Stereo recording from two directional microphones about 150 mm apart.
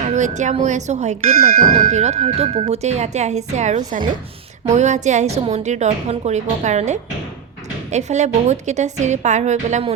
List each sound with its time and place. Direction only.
0.0 s speech: 50° right (ahead or behind)